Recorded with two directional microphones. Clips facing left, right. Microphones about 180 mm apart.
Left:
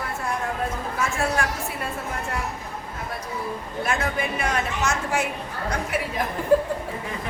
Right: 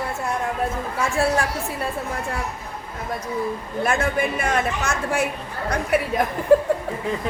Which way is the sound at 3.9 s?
50° right (ahead or behind).